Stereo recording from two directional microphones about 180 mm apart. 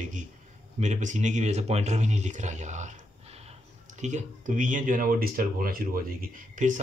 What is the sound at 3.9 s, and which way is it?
Speech, 40° right (ahead or behind).